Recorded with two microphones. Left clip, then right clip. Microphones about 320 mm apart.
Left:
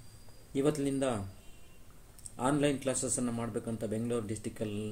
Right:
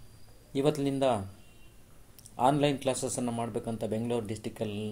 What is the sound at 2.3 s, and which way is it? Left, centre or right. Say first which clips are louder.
A man's voice: right 5 dB; centre.